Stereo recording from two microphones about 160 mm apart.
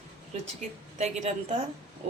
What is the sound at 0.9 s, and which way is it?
Speech, 45° right (ahead or behind).